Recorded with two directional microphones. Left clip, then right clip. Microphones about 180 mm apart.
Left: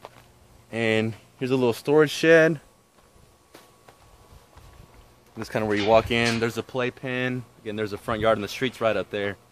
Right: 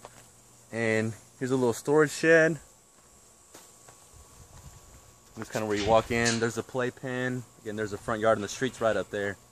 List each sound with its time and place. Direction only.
0.7 s a sound: 15° left (ahead or behind)
1.4 s speech: 5° left (ahead or behind); by 2.6 s 20° left (ahead or behind)
5.3 s speech: 30° left (ahead or behind)
6.0 s speech: 10° left (ahead or behind)
6.4 s speech: 5° right (ahead or behind)